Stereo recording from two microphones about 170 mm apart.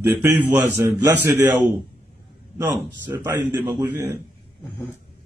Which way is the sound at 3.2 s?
10° right (ahead or behind).